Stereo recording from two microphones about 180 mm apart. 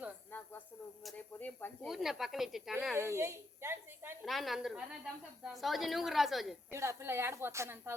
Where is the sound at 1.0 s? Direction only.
10° left (ahead or behind).